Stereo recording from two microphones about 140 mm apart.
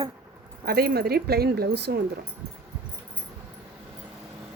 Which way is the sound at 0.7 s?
90° right.